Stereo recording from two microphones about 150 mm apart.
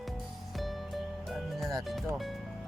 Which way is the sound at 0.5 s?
Centre (ahead or behind).